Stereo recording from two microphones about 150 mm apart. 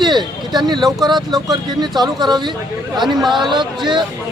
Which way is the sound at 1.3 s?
25° right (ahead or behind).